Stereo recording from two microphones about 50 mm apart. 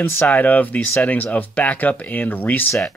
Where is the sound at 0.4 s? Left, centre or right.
Left.